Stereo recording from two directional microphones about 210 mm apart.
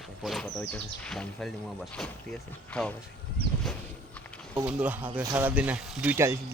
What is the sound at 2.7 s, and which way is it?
Speech, 5° left (ahead or behind).